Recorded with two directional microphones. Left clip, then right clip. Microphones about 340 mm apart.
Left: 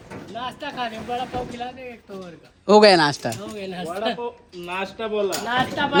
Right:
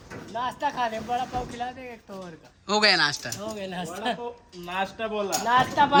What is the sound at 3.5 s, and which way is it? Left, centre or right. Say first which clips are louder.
Speech: left 2 dB; centre.